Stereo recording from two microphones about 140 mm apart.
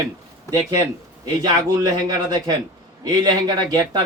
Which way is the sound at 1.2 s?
30° right (ahead or behind).